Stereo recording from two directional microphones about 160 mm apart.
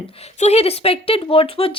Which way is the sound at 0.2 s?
40° left (ahead or behind).